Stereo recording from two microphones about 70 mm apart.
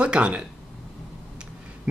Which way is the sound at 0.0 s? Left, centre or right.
Centre.